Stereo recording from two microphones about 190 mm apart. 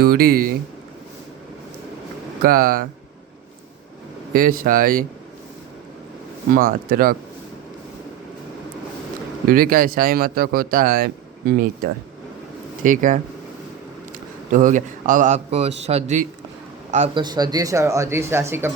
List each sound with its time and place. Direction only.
0.0 s speech: 55° right (ahead or behind)
2.4 s speech: 50° right (ahead or behind)
4.3 s speech: 50° right (ahead or behind)
6.5 s speech: 50° right (ahead or behind)
9.5 s speech: 50° right (ahead or behind)
14.5 s a man's voice: 40° right (ahead or behind)
17.2 s speech: 20° right (ahead or behind)